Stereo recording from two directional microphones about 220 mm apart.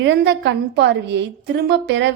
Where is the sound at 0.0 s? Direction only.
50° right (ahead or behind).